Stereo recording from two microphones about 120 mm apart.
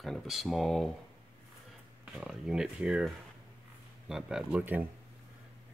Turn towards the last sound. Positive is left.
turn(degrees=-15)  # may be behind; listen again after turning